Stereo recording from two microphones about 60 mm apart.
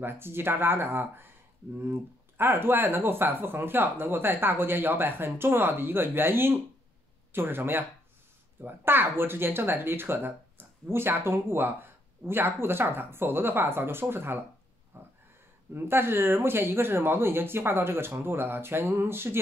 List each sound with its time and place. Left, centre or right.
0.0 s speech: right
14.9 s a sound: right
15.7 s speech: right